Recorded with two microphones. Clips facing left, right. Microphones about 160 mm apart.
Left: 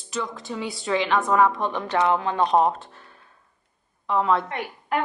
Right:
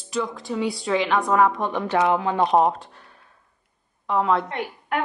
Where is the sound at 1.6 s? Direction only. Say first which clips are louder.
Right 2 dB; 15° right (ahead or behind).